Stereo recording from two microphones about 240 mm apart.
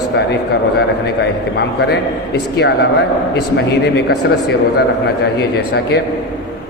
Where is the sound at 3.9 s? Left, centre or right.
Left.